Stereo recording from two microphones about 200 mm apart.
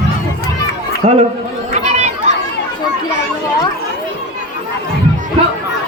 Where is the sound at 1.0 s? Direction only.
45° right (ahead or behind).